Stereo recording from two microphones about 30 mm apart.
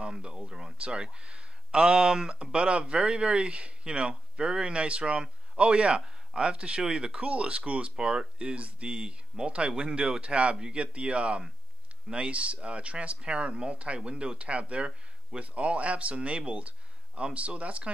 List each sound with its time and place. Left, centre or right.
0.0 s a sound: right
0.5 s speech: right
0.7 s speech: right
7.9 s speech: right
8.8 s speech: right